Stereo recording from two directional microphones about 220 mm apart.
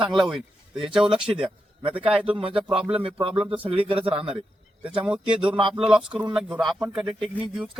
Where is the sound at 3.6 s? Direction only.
25° right (ahead or behind).